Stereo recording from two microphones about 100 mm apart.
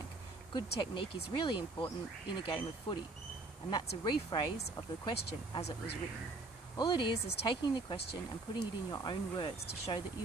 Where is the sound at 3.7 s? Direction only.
45° left (ahead or behind).